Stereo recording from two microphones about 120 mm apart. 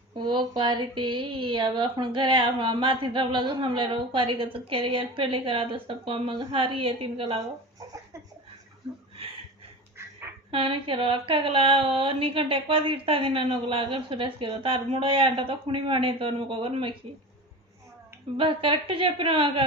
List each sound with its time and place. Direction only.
0.1 s speech: 40° right (ahead or behind)
10.0 s duck: 20° right (ahead or behind)
10.5 s speech: 50° right (ahead or behind)
18.3 s speech: 45° right (ahead or behind)